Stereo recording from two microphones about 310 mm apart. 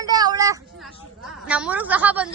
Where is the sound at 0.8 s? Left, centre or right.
Centre.